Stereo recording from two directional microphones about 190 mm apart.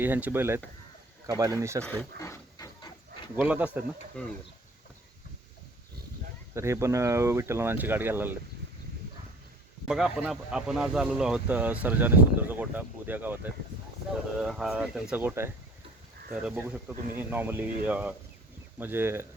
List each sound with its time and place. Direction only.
0.0 s speech: 10° right (ahead or behind)
1.8 s a sound: 10° left (ahead or behind)
3.4 s speech: 10° right (ahead or behind)
4.2 s speech: 5° left (ahead or behind)
6.5 s speech: 15° right (ahead or behind)
9.8 s speech: centre (ahead or behind)